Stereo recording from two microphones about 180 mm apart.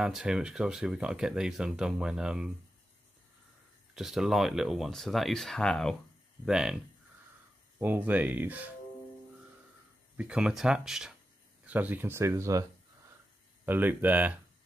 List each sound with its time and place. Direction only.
0.0 s speech: 5° right (ahead or behind)
3.9 s speech: centre (ahead or behind)
7.8 s speech: 10° right (ahead or behind)
10.1 s speech: 5° right (ahead or behind)
13.7 s speech: 10° right (ahead or behind)